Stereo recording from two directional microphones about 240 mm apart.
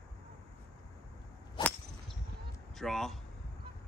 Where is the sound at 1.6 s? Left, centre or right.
Centre.